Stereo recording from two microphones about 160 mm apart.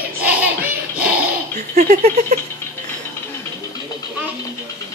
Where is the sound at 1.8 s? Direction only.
55° right (ahead or behind).